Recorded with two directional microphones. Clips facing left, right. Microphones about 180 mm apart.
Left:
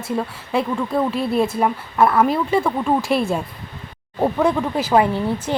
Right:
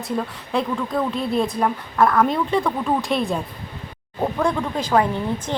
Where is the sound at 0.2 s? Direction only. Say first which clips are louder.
Left 2 dB; 5° left (ahead or behind).